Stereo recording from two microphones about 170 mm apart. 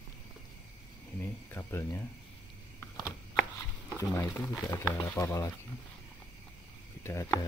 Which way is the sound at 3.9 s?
15° left (ahead or behind).